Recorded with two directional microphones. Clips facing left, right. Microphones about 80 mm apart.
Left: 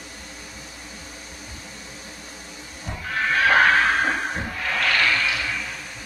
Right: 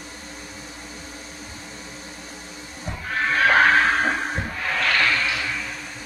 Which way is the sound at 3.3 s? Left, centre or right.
Right.